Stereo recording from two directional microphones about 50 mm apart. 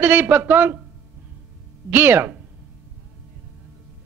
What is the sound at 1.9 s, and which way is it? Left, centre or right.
Speech, right.